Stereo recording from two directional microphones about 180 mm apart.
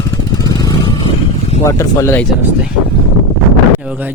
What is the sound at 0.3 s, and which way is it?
Vehicle, 20° left (ahead or behind).